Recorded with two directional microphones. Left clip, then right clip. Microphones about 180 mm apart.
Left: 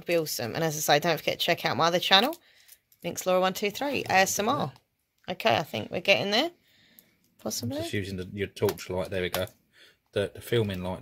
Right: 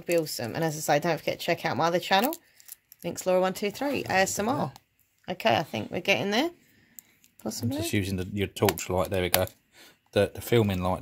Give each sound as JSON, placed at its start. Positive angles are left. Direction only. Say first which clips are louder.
{"t": 0.0, "sound": "speech", "louder": "even", "side_deg": 0}
{"t": 7.8, "sound": "speech", "louder": "right 3 dB", "side_deg": -60}